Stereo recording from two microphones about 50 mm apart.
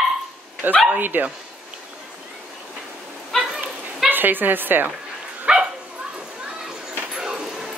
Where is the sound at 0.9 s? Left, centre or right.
Right.